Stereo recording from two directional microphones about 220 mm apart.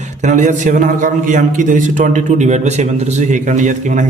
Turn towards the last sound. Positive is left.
turn(degrees=-35)  # may be behind; listen again after turning